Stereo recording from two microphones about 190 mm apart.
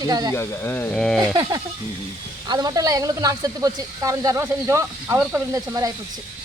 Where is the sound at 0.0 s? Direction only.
20° right (ahead or behind).